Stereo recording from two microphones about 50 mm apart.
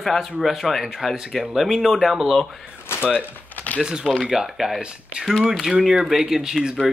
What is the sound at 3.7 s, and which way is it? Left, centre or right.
Speech, centre.